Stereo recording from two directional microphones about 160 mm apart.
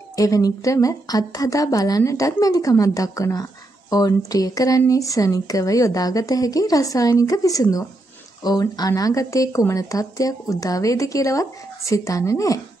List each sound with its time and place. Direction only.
0.1 s a woman's voice: 20° left (ahead or behind)